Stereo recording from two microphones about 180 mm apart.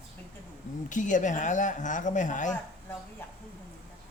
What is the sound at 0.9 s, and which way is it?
Speech, 45° left (ahead or behind).